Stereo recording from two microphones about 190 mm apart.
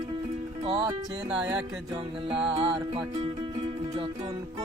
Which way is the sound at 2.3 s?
5° right (ahead or behind).